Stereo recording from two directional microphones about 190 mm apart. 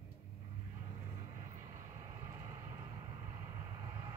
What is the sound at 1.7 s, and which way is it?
Vehicle, 20° right (ahead or behind).